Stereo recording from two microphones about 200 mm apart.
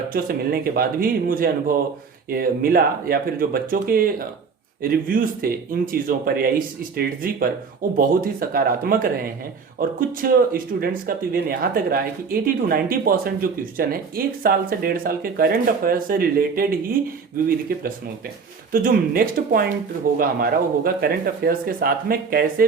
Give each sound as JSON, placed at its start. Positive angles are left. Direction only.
{"t": 0.1, "sound": "speech", "side_deg": -45}
{"t": 18.7, "sound": "speech", "side_deg": -45}